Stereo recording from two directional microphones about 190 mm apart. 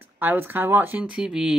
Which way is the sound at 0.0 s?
10° right (ahead or behind).